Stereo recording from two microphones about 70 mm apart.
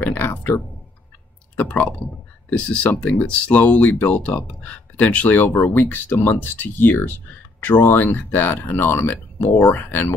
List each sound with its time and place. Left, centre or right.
0.3 s speech: left
1.6 s speech: centre